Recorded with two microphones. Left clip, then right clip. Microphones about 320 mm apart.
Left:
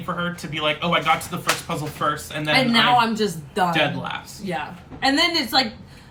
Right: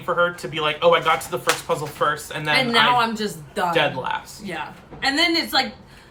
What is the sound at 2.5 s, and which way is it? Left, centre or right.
A woman's voice, centre.